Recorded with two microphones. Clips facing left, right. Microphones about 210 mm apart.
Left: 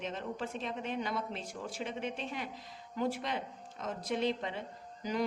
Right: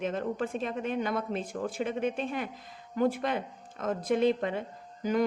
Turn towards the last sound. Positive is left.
turn(degrees=-50)  # may be behind; listen again after turning